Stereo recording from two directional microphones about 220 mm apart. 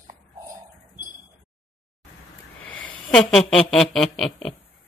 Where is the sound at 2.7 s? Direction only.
65° left (ahead or behind).